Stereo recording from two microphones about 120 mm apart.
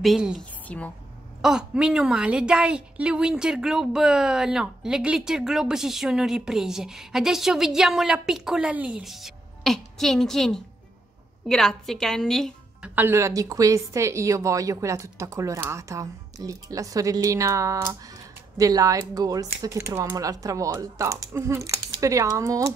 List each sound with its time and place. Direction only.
0.0 s a woman's voice: 5° right (ahead or behind)
0.4 s a woman's voice: 10° left (ahead or behind)
1.4 s a woman's voice: 5° right (ahead or behind)
12.8 s a woman's voice: 15° right (ahead or behind)